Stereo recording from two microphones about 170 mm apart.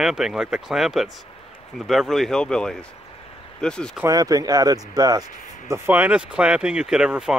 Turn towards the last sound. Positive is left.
turn(degrees=-5)  # may be behind; listen again after turning